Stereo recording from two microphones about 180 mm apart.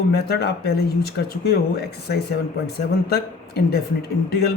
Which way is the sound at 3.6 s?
60° left (ahead or behind).